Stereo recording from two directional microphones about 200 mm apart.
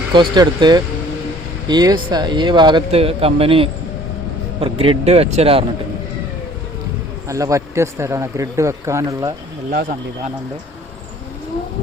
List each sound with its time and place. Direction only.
0.1 s speech: 20° right (ahead or behind)
7.3 s a man's voice: 15° right (ahead or behind)